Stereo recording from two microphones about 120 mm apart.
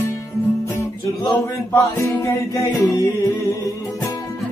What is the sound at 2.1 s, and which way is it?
Music, 25° left (ahead or behind).